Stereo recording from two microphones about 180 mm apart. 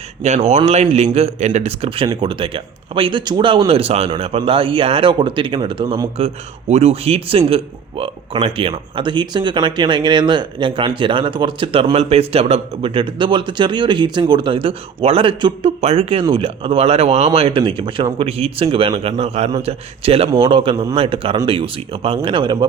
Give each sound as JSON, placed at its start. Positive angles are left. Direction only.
{"t": 0.2, "sound": "speech", "side_deg": -40}